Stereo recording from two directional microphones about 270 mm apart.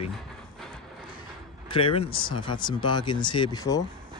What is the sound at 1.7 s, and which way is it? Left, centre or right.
Speech, left.